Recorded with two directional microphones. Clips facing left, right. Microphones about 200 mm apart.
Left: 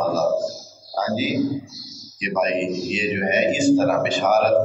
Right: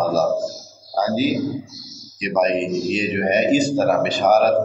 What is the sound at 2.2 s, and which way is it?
A man's voice, 40° right (ahead or behind).